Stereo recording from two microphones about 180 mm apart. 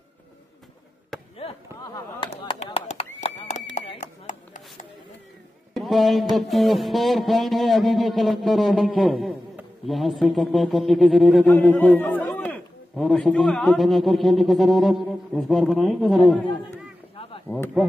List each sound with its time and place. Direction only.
1.9 s a sound: 25° left (ahead or behind); by 4.6 s 40° left (ahead or behind)
5.8 s a man's voice: centre (ahead or behind)
17.1 s chop: 30° left (ahead or behind)